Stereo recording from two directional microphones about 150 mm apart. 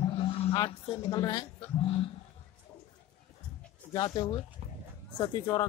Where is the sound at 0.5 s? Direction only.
30° left (ahead or behind).